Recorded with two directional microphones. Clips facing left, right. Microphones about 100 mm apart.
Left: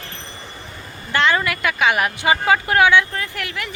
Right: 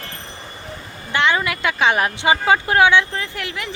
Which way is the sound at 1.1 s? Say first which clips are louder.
Even; 15° right (ahead or behind).